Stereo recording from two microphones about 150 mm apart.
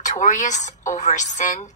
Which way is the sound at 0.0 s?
55° left (ahead or behind).